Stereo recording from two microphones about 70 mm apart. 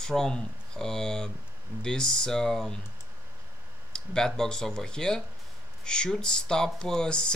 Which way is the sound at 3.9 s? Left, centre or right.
Centre.